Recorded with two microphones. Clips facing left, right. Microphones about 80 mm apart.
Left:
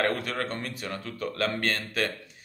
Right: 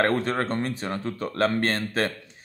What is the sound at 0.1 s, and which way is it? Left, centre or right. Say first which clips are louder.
Speech: right 6 dB; right.